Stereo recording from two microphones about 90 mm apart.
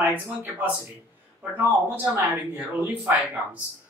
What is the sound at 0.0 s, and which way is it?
Speech, 20° right (ahead or behind).